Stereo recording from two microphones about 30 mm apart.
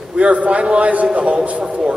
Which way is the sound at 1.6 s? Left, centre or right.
Right.